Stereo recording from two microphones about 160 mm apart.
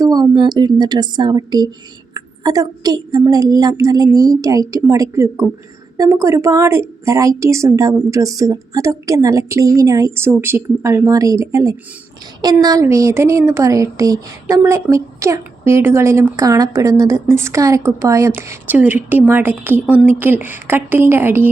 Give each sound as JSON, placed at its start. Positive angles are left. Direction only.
{"t": 0.0, "sound": "a woman's voice", "side_deg": -25}